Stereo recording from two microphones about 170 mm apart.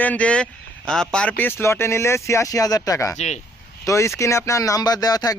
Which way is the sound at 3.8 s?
15° left (ahead or behind).